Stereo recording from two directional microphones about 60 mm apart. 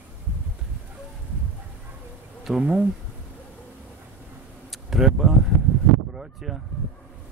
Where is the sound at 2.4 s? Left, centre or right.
Centre.